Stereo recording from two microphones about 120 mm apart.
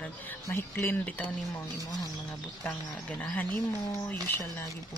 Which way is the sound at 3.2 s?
10° left (ahead or behind).